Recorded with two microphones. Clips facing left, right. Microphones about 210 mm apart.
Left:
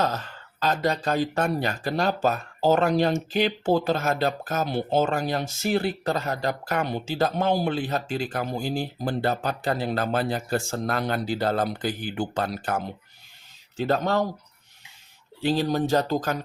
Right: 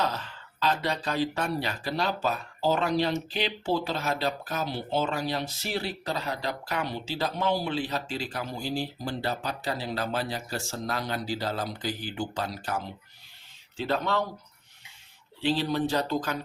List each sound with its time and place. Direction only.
0.0 s speech: 45° left (ahead or behind)
13.7 s speech: 45° left (ahead or behind)
15.4 s speech: 45° left (ahead or behind)